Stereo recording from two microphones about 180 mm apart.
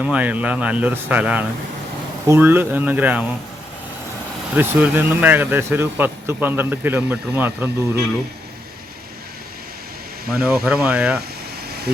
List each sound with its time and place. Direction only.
0.0 s speech: 10° right (ahead or behind)
4.5 s speech: 10° right (ahead or behind)
10.3 s speech: 5° right (ahead or behind)